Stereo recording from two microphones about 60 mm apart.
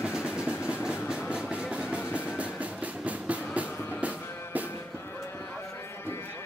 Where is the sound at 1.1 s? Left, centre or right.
Centre.